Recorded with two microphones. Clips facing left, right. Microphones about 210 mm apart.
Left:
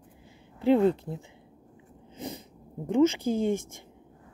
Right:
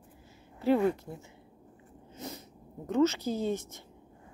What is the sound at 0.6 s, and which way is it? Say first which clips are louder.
Speech: left 4 dB; 20° left (ahead or behind).